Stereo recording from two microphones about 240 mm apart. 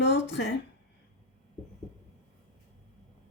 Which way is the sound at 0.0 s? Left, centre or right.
Left.